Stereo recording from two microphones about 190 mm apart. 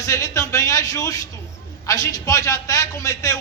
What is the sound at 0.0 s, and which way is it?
A woman's voice, 15° left (ahead or behind).